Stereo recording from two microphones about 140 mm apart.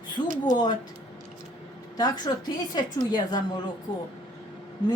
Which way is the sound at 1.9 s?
30° left (ahead or behind).